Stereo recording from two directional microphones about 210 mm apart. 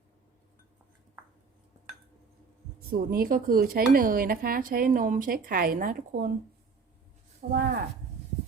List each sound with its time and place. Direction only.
2.9 s a woman's voice: 45° right (ahead or behind)
7.4 s speech: 45° right (ahead or behind)